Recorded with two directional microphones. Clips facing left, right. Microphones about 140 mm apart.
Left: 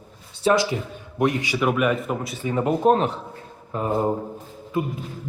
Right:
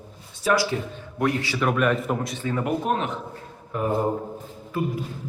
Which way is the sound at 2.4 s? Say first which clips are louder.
Left 6 dB; 20° left (ahead or behind).